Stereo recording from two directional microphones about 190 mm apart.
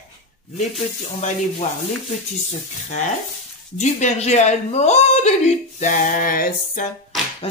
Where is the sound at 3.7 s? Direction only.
35° left (ahead or behind).